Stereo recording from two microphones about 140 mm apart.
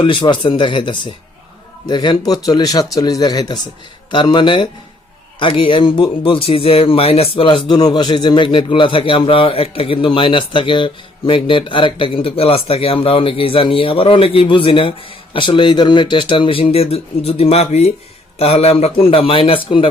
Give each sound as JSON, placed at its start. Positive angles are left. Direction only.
{"t": 0.0, "sound": "speech", "side_deg": 35}